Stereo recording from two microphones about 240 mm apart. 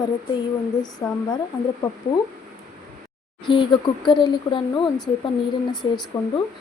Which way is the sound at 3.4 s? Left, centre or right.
Centre.